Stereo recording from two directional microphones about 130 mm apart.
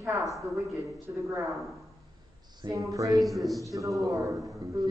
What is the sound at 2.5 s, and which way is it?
Speech, 30° right (ahead or behind).